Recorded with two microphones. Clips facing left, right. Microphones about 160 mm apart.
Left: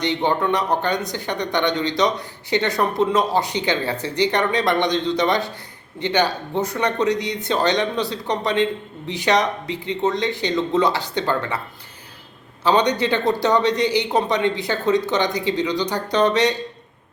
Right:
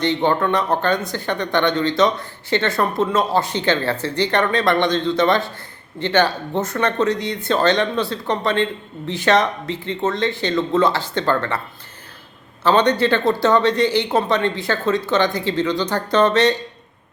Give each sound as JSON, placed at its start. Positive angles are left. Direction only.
{"t": 0.0, "sound": "speech", "side_deg": 15}
{"t": 12.6, "sound": "speech", "side_deg": 15}